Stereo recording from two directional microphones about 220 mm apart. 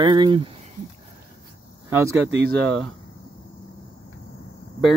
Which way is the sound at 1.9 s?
10° right (ahead or behind).